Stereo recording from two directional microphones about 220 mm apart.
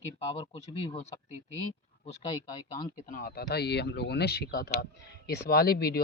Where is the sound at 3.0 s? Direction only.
40° left (ahead or behind).